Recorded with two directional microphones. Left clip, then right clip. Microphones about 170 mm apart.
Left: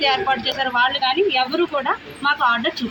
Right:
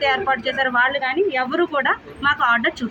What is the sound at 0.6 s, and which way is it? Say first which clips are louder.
A woman's voice: even; 5° right (ahead or behind).